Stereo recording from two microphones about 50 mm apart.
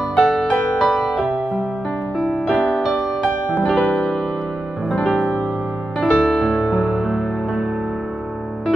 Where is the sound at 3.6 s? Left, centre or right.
Centre.